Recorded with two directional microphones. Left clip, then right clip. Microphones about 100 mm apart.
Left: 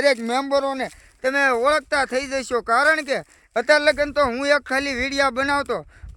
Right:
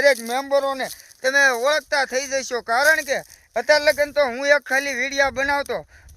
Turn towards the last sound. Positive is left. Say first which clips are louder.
# even
turn(degrees=45)  # may be behind; listen again after turning